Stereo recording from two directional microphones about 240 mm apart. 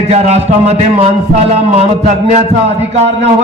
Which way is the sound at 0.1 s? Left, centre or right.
Right.